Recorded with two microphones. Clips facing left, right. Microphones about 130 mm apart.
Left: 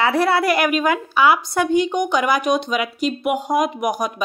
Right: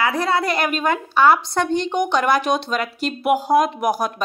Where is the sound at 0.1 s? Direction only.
20° right (ahead or behind).